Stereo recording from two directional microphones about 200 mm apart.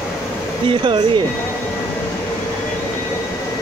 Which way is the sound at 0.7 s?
25° right (ahead or behind).